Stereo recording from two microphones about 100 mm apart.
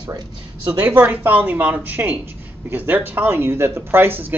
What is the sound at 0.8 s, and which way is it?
Speech, 20° right (ahead or behind).